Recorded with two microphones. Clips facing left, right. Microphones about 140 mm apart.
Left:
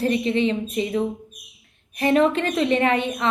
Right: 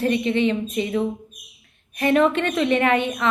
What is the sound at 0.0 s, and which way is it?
A woman's voice, 35° left (ahead or behind).